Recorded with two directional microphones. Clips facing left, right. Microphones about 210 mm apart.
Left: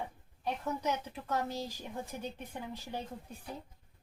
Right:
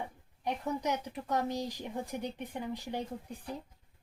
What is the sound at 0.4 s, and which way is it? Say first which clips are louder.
Speech: right 1 dB; 15° right (ahead or behind).